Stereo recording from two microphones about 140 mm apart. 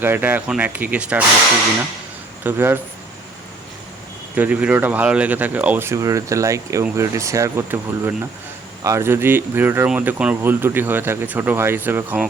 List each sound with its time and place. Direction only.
0.0 s speech: 15° right (ahead or behind)
2.4 s speech: 15° right (ahead or behind)
4.4 s speech: 10° right (ahead or behind)